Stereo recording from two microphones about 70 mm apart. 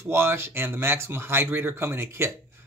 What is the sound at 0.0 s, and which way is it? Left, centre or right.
Speech, right.